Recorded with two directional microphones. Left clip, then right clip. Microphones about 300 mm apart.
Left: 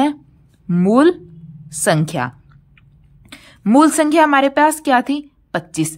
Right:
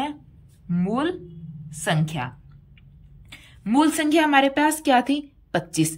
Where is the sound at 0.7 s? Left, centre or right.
Centre.